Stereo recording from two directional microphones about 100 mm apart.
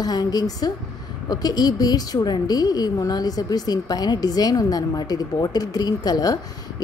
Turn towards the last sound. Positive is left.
turn(degrees=40)  # may be behind; listen again after turning